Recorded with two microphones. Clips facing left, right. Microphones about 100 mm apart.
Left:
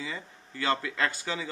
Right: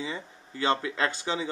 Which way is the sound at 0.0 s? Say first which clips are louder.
Right 3 dB; 20° right (ahead or behind).